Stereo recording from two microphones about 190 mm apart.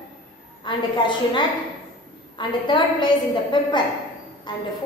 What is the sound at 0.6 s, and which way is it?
A woman's voice, 25° left (ahead or behind).